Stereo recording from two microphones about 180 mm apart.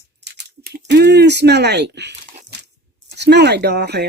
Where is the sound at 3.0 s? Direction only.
70° right (ahead or behind).